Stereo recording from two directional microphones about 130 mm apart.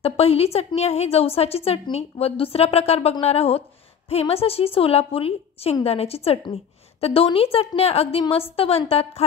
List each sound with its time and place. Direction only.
0.0 s a woman's voice: 50° left (ahead or behind)